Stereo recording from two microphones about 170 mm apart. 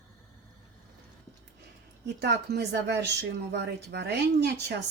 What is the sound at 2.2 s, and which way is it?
A woman's voice, 75° right (ahead or behind).